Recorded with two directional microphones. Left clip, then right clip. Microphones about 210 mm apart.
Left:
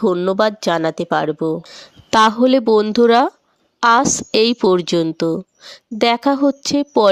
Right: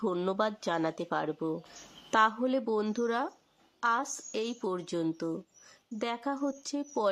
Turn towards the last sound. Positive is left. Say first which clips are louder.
# left 17 dB
turn(degrees=35)  # may be behind; listen again after turning